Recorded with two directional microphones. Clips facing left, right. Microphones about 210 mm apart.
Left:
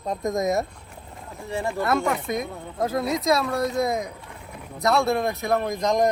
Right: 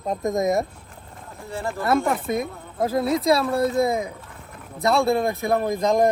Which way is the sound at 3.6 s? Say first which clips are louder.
Right 5 dB; 5° right (ahead or behind).